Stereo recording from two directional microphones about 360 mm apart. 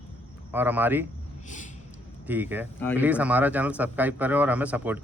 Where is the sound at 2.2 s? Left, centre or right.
Centre.